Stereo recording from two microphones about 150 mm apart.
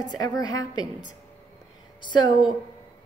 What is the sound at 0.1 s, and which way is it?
Speech, 25° left (ahead or behind).